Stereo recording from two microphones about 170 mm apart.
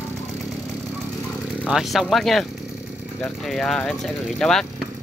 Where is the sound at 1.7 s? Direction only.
Centre (ahead or behind).